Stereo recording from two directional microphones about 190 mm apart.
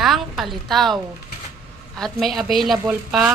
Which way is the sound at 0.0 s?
Centre (ahead or behind).